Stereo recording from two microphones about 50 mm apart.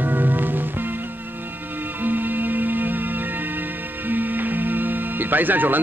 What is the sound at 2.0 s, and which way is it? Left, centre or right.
Music, right.